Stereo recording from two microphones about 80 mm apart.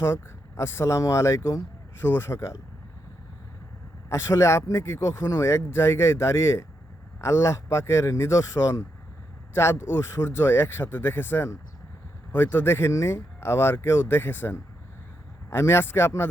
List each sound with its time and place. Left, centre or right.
0.0 s speech: left
4.1 s speech: left